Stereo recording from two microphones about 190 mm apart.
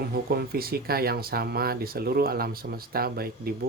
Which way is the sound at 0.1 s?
55° right (ahead or behind).